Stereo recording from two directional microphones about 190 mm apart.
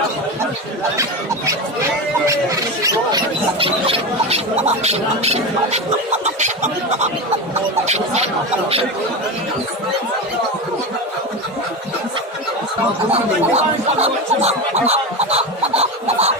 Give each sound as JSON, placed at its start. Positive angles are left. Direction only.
{"t": 3.6, "sound": "speech", "side_deg": -30}
{"t": 13.1, "sound": "speech", "side_deg": -35}